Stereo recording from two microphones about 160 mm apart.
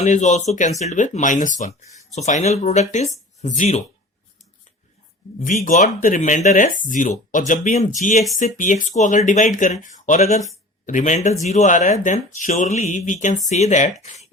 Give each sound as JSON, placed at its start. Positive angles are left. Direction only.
{"t": 0.0, "sound": "speech", "side_deg": 50}
{"t": 5.6, "sound": "speech", "side_deg": 55}